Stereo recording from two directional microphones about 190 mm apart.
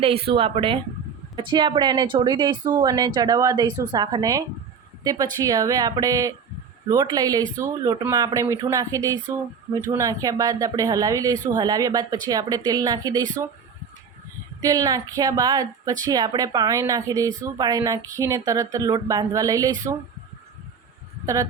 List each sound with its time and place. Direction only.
0.0 s speech: 30° right (ahead or behind)
3.7 s a woman's voice: 10° left (ahead or behind)
3.9 s speech: 20° right (ahead or behind)
14.6 s speech: 20° right (ahead or behind)